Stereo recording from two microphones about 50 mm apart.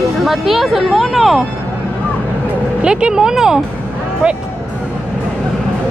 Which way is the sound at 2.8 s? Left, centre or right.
Centre.